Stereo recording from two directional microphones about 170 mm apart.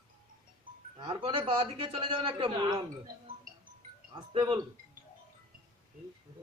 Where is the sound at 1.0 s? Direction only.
30° right (ahead or behind).